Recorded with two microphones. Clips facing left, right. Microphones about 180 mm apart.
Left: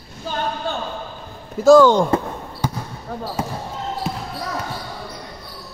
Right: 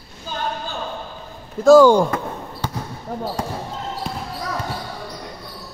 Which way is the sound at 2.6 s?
10° left (ahead or behind).